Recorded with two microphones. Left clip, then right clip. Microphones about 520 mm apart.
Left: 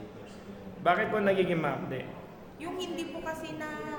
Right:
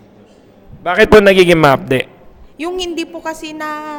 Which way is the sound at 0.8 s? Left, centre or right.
Right.